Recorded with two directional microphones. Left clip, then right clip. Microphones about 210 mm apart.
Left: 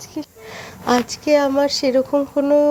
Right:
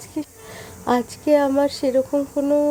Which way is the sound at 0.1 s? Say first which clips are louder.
Right 1 dB; 10° left (ahead or behind).